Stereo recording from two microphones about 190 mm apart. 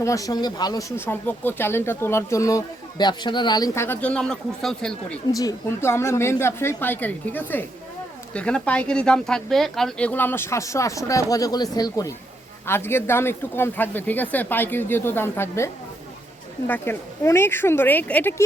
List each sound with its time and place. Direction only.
0.0 s speech: 15° left (ahead or behind)
5.3 s speech: 20° left (ahead or behind)